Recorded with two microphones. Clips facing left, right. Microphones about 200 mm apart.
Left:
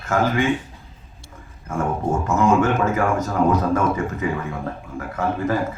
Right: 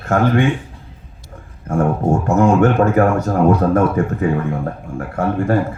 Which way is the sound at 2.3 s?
60° right (ahead or behind).